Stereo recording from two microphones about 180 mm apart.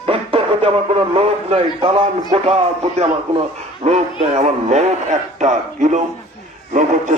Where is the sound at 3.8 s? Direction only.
40° right (ahead or behind).